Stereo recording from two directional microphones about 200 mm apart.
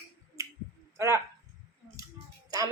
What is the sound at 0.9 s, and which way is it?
Speech, 15° right (ahead or behind).